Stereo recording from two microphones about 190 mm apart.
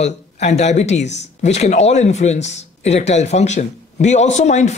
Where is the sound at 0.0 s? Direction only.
35° left (ahead or behind).